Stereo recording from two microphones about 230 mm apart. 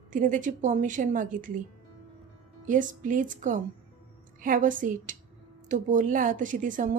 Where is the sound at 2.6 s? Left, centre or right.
Right.